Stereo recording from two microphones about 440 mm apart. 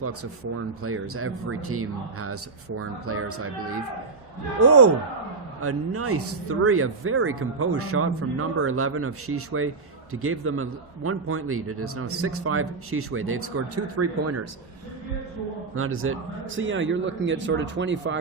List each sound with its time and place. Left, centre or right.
0.8 s speech: right
15.7 s speech: right